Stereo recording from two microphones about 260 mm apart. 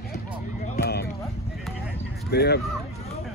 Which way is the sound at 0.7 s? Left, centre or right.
Left.